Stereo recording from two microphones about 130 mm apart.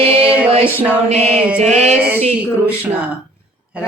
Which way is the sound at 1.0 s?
55° right (ahead or behind).